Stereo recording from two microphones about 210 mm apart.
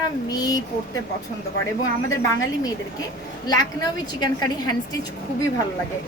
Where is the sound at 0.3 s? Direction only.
15° left (ahead or behind).